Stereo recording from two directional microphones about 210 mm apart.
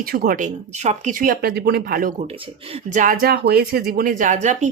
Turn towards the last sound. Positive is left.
turn(degrees=-35)  # may be behind; listen again after turning